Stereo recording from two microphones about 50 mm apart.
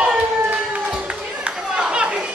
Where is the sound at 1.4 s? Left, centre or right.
Right.